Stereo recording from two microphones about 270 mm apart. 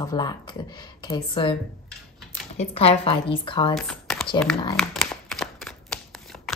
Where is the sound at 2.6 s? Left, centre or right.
Left.